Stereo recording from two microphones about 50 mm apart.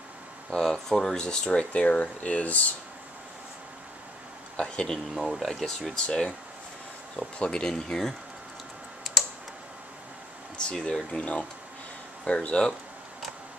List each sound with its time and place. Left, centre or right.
0.5 s speech: centre; by 2.6 s left
4.6 s speech: centre
5.1 s speech: centre
6.0 s speech: left
7.3 s speech: centre
10.6 s speech: centre
12.3 s speech: left